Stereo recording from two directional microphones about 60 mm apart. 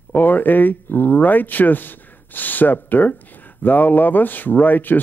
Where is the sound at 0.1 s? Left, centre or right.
Left.